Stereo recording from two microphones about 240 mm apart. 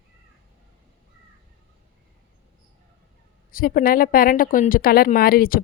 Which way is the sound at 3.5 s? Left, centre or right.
Left.